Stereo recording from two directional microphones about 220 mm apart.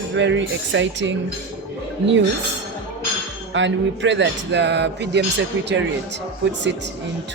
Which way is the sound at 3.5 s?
55° right (ahead or behind).